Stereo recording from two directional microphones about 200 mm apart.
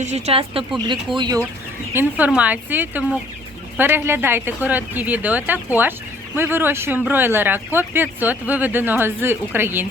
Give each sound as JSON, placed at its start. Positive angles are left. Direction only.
{"t": 0.0, "sound": "speech", "side_deg": -35}
{"t": 1.9, "sound": "speech", "side_deg": -10}